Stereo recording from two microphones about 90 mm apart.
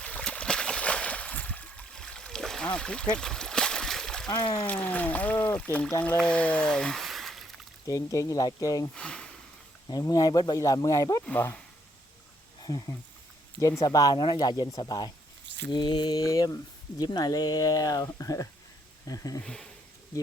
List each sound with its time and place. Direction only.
0.0 s a sound: 10° left (ahead or behind)
4.3 s speech: 60° left (ahead or behind)
4.6 s speech: 15° left (ahead or behind); by 7.4 s centre (ahead or behind)
7.9 s speech: 40° left (ahead or behind)
9.0 s speech: 10° left (ahead or behind)
9.9 s speech: 45° left (ahead or behind)
12.6 s speech: 50° left (ahead or behind)
14.2 s speech: 55° left (ahead or behind)
16.2 s speech: 40° left (ahead or behind)
19.5 s speech: 5° left (ahead or behind)